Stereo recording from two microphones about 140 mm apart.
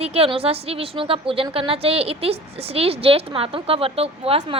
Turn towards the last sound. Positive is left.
turn(degrees=-45)  # may be behind; listen again after turning